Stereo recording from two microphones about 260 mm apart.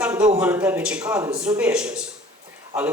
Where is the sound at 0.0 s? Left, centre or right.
Centre.